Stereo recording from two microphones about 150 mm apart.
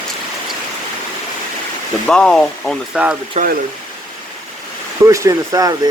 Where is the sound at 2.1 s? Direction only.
5° left (ahead or behind).